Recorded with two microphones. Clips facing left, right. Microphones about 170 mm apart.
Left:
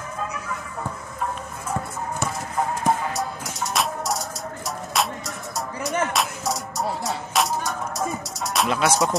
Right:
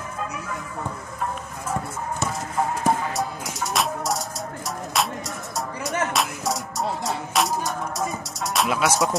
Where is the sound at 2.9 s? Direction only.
Centre (ahead or behind).